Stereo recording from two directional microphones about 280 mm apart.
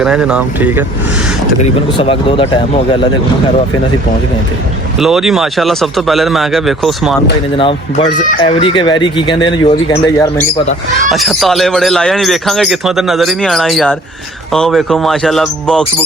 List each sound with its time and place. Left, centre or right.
0.0 s speech: centre
1.6 s speech: centre
4.9 s speech: centre
7.6 s speech: centre